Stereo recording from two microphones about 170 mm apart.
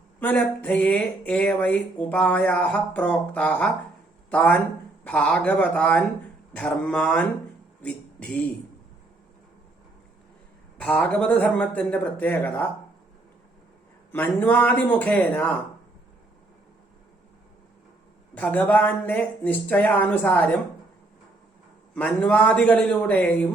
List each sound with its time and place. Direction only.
0.2 s speech: 10° left (ahead or behind)
10.8 s speech: 5° left (ahead or behind)
14.1 s speech: 10° left (ahead or behind)
18.3 s speech: 10° left (ahead or behind)
21.9 s speech: 10° left (ahead or behind)